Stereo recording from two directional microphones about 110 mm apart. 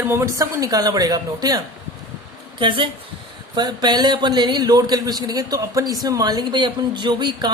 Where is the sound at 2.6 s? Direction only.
50° right (ahead or behind).